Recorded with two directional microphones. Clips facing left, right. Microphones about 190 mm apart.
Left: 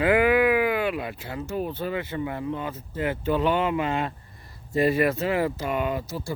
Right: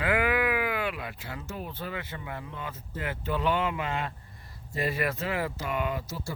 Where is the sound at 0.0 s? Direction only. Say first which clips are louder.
Left 7 dB; 20° left (ahead or behind).